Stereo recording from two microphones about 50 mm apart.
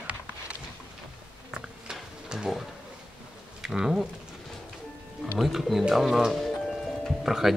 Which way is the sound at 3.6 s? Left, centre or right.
Centre.